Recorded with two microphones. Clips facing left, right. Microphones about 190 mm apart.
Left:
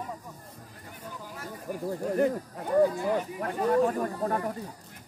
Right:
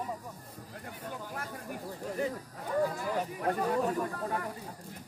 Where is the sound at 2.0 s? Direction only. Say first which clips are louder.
Left 8 dB; 55° left (ahead or behind).